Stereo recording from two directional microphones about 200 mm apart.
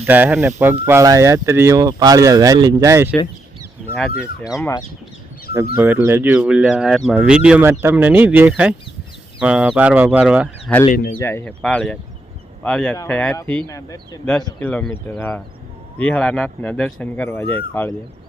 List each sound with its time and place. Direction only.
0.0 s speech: 10° right (ahead or behind)
3.8 s a sound: 5° left (ahead or behind)
5.7 s speech: 10° right (ahead or behind)
10.7 s speech: 5° left (ahead or behind)